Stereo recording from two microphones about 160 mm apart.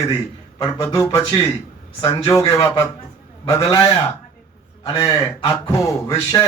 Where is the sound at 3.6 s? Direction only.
20° left (ahead or behind).